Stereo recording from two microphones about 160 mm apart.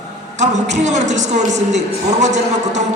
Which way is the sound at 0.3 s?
45° right (ahead or behind).